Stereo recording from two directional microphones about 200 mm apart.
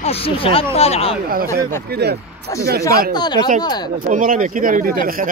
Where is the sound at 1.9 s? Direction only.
55° right (ahead or behind).